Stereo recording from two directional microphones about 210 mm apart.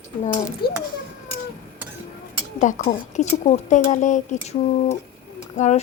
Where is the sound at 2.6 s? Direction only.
35° left (ahead or behind).